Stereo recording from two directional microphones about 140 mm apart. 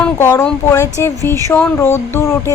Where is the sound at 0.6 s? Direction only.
20° left (ahead or behind).